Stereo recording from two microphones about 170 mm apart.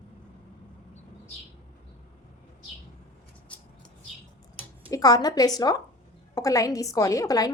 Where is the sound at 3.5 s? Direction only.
10° left (ahead or behind).